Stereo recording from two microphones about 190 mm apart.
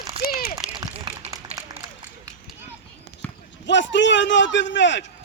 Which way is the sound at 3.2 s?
10° left (ahead or behind).